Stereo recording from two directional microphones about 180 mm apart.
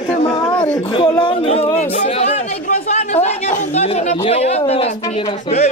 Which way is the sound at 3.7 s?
35° left (ahead or behind).